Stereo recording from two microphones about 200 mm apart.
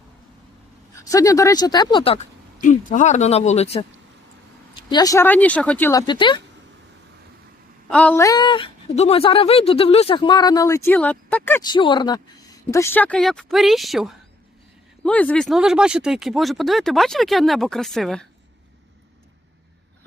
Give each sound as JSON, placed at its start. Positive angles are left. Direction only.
{"t": 1.0, "sound": "speech", "side_deg": 15}
{"t": 2.6, "sound": "speech", "side_deg": 40}
{"t": 4.9, "sound": "speech", "side_deg": 20}
{"t": 7.9, "sound": "speech", "side_deg": 5}
{"t": 11.6, "sound": "speech", "side_deg": 20}